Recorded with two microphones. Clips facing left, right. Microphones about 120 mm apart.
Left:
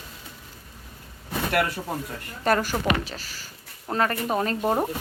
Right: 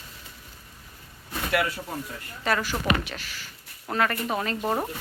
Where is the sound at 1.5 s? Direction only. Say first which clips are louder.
Left 1 dB; 50° left (ahead or behind).